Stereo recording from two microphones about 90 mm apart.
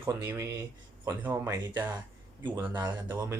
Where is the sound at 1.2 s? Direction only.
25° right (ahead or behind).